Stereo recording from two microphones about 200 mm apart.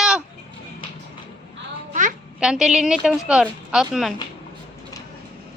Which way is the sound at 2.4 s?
5° right (ahead or behind).